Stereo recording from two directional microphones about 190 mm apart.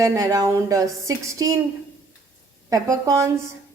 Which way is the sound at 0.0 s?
15° right (ahead or behind).